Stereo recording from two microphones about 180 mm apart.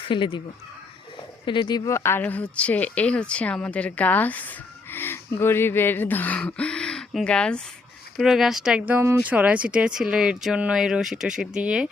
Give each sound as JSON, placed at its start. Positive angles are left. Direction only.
{"t": 0.0, "sound": "speech", "side_deg": 25}
{"t": 1.5, "sound": "speech", "side_deg": 25}